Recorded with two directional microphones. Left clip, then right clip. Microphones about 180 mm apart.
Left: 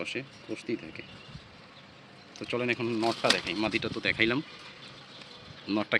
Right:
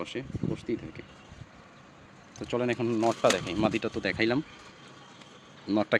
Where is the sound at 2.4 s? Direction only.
35° right (ahead or behind).